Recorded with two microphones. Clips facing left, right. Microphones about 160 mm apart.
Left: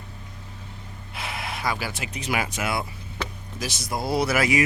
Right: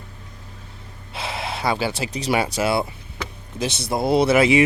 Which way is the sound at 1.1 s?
30° right (ahead or behind).